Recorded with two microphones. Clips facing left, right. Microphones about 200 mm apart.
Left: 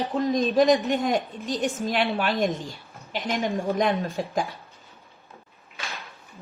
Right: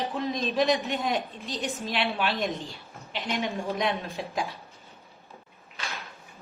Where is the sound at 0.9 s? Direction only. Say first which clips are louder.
Left 5 dB; 45° left (ahead or behind).